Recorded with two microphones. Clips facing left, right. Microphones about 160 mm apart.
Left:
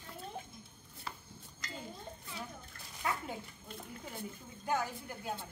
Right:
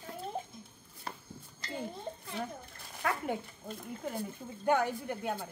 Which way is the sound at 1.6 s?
30° right (ahead or behind).